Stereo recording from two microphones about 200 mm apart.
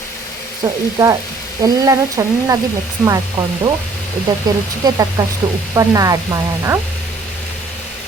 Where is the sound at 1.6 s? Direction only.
15° right (ahead or behind).